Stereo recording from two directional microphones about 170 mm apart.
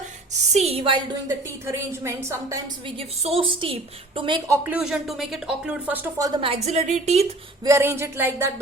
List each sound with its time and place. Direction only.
0.5 s a woman's voice: 35° right (ahead or behind)
1.6 s speech: 15° right (ahead or behind)
3.0 s a woman's voice: 35° right (ahead or behind)
4.4 s speech: 15° right (ahead or behind)
6.2 s a woman's voice: 30° right (ahead or behind)
7.6 s speech: 15° right (ahead or behind)